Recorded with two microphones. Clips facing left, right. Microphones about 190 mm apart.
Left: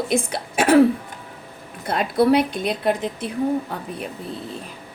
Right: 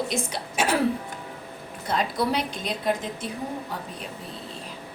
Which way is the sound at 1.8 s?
60° left (ahead or behind).